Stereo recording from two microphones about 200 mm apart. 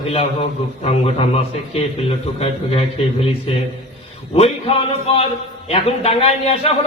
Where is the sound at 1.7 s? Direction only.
30° left (ahead or behind).